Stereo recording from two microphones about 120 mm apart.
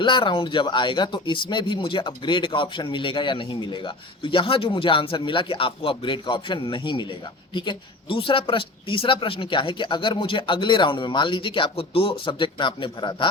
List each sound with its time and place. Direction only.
0.0 s speech: 40° left (ahead or behind)